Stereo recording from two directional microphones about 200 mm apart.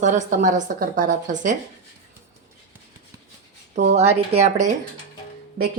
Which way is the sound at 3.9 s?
30° right (ahead or behind).